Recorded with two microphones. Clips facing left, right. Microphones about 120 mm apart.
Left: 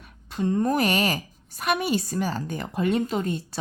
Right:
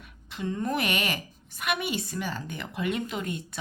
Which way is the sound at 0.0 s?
40° left (ahead or behind).